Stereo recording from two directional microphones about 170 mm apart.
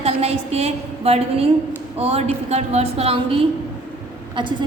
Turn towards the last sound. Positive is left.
turn(degrees=-25)  # may be behind; listen again after turning